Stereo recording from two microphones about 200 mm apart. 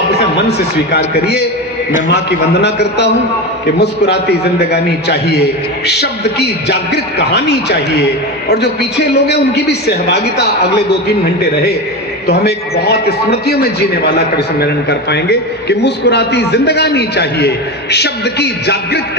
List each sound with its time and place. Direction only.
0.2 s a man's voice: 55° left (ahead or behind)